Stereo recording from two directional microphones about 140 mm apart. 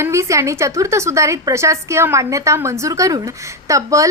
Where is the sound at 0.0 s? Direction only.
20° right (ahead or behind).